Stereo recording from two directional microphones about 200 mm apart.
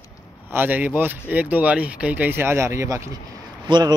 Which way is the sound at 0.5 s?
10° right (ahead or behind).